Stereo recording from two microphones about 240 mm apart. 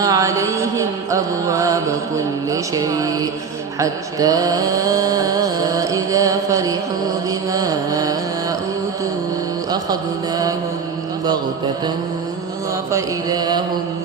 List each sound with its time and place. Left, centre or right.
0.0 s mantra: centre
7.3 s carnatic music: centre
9.7 s mantra: centre
12.9 s mantra: centre